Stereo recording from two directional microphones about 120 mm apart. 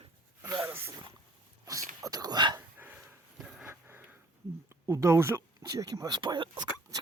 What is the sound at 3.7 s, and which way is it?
Sniff, 20° right (ahead or behind).